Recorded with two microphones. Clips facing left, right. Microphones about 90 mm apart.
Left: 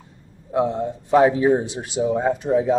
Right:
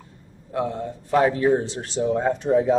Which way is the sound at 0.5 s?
20° left (ahead or behind).